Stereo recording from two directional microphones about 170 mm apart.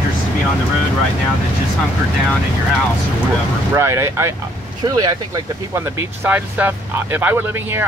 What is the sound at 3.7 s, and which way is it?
Speech, 15° right (ahead or behind).